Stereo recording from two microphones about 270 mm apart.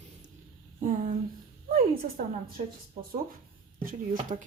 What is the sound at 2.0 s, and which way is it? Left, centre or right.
Speech, right.